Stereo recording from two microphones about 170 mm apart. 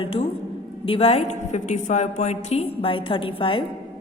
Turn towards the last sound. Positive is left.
turn(degrees=30)  # may be behind; listen again after turning